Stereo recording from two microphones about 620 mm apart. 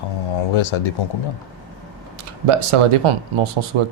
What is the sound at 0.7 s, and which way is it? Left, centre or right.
Speech, left.